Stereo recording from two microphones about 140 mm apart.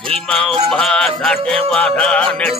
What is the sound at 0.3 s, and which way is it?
Music, 5° left (ahead or behind).